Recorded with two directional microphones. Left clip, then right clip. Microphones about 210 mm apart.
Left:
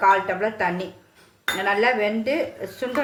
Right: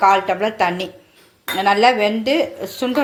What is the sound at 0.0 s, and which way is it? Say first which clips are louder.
Speech: right 4 dB; 30° right (ahead or behind).